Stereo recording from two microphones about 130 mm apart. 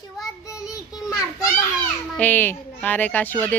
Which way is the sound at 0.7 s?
25° left (ahead or behind).